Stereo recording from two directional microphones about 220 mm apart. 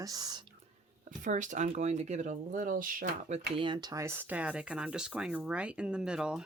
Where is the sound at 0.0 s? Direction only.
15° right (ahead or behind).